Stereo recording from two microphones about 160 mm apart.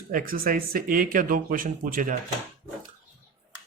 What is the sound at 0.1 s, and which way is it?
Speech, 65° right (ahead or behind).